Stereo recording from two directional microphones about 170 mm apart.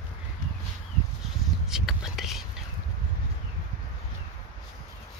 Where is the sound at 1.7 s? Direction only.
Centre (ahead or behind).